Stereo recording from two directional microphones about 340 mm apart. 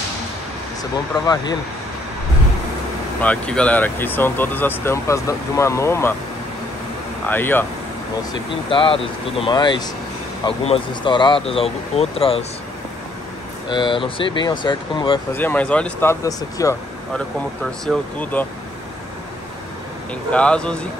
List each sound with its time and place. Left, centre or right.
1.2 s speech: centre
3.2 s speech: centre
7.2 s speech: centre
13.7 s speech: centre
20.2 s speech: centre